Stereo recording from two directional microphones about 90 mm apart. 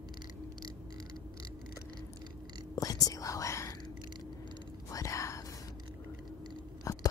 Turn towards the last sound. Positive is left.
turn(degrees=40)  # may be behind; listen again after turning